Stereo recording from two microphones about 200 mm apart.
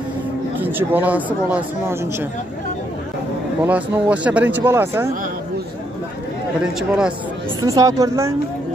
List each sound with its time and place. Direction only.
0.6 s speech: 10° right (ahead or behind)
3.6 s speech: 5° right (ahead or behind)
6.6 s speech: 5° right (ahead or behind)
7.6 s speech: 15° right (ahead or behind)